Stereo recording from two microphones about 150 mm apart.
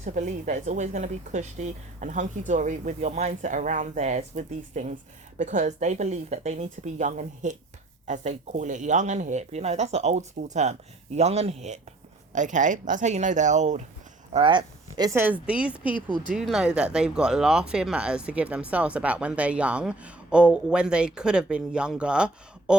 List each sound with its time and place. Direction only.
0.0 s speech: 55° right (ahead or behind)
14.3 s speech: 35° right (ahead or behind)
15.2 s speech: 10° right (ahead or behind)